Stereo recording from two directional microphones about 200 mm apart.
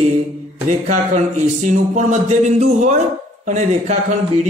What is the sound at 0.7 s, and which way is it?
Speech, 40° right (ahead or behind).